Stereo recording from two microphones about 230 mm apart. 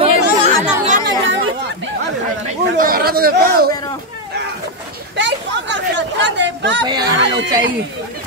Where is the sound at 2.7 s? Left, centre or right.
Right.